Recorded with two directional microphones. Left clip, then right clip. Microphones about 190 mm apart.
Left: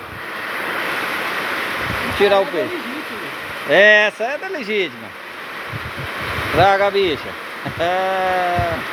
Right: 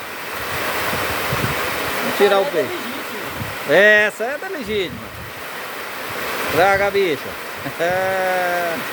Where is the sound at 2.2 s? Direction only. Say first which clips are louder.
Left 1 dB; 25° right (ahead or behind).